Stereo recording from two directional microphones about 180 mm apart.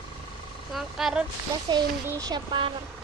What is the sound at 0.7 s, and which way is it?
Speech, centre (ahead or behind).